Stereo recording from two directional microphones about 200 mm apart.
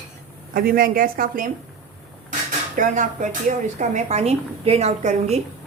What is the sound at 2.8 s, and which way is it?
A woman's voice, 40° right (ahead or behind).